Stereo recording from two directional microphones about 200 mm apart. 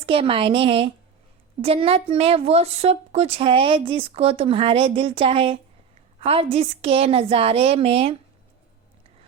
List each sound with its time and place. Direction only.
0.0 s a woman's voice: 25° right (ahead or behind)